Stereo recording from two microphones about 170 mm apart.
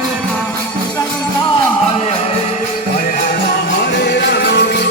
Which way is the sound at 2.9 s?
50° left (ahead or behind).